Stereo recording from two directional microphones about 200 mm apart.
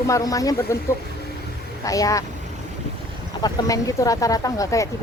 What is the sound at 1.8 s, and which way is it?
Speech, 15° left (ahead or behind).